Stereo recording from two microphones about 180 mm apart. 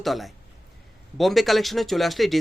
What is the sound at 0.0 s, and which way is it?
Speech, centre (ahead or behind).